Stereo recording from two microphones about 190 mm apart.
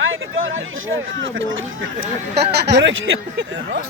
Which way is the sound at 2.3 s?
60° right (ahead or behind).